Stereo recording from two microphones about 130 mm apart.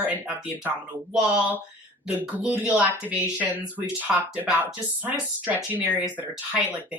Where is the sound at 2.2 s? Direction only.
10° right (ahead or behind).